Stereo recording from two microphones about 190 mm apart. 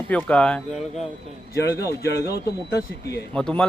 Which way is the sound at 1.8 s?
15° left (ahead or behind).